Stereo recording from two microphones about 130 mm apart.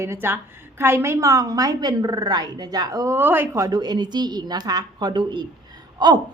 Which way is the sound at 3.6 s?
30° right (ahead or behind).